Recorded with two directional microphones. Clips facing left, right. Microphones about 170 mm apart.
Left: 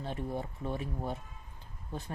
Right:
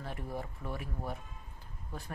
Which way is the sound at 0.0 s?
25° left (ahead or behind).